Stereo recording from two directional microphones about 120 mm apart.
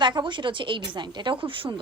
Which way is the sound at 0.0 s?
40° right (ahead or behind).